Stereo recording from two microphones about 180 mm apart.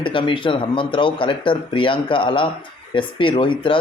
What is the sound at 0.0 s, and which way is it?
Speech, 25° left (ahead or behind).